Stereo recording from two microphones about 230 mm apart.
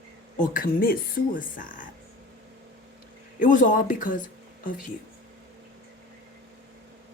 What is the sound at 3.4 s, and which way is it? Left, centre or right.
Speech, left.